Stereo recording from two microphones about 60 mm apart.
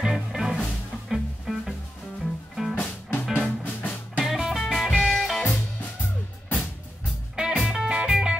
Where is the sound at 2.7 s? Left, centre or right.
Left.